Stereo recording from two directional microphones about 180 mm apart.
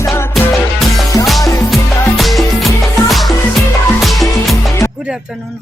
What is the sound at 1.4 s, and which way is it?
Music, 20° left (ahead or behind).